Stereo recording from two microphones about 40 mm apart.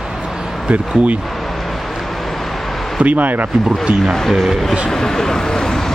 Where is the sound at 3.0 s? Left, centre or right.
Right.